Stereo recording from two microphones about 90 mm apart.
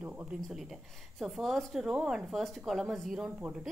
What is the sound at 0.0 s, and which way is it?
Speech, 20° right (ahead or behind).